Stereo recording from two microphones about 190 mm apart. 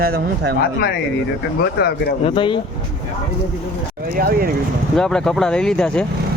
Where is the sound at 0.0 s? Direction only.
55° right (ahead or behind).